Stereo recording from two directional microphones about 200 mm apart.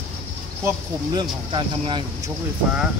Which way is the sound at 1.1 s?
25° right (ahead or behind).